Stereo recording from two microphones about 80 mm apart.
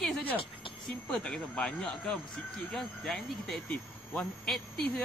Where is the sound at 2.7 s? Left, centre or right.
Centre.